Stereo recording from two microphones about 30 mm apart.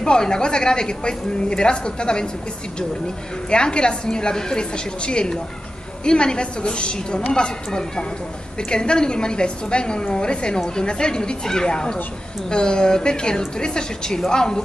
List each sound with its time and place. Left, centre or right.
0.0 s a woman's voice: left
3.4 s a woman's voice: left